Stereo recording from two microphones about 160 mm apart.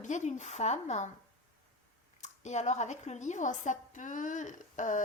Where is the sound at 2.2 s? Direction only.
45° left (ahead or behind).